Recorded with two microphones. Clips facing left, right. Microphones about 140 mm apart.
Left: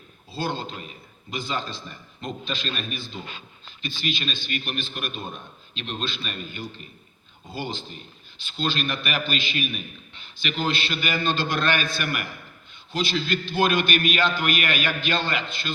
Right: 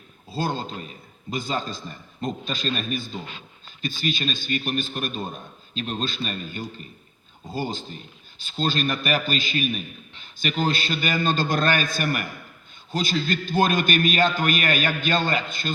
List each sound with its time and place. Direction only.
0.3 s a man's voice: 40° right (ahead or behind)